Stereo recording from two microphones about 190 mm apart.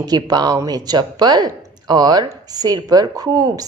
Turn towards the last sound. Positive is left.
turn(degrees=-20)  # may be behind; listen again after turning